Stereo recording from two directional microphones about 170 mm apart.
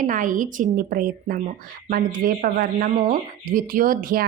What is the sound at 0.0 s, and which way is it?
A woman's voice, 50° right (ahead or behind).